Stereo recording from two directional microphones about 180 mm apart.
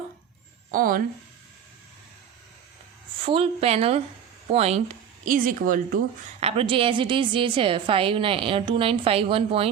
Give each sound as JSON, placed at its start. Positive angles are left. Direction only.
{"t": 0.7, "sound": "speech", "side_deg": -50}
{"t": 3.2, "sound": "speech", "side_deg": -30}
{"t": 5.2, "sound": "speech", "side_deg": -50}
{"t": 6.4, "sound": "a woman's voice", "side_deg": -30}